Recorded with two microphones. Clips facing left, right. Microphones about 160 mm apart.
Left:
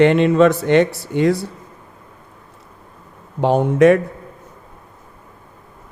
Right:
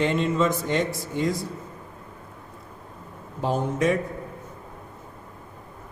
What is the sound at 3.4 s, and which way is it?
Speech, 70° left (ahead or behind).